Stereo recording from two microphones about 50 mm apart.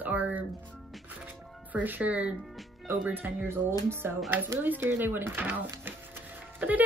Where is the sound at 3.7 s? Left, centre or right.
Right.